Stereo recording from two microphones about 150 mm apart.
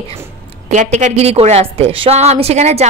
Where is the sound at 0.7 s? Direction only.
55° right (ahead or behind).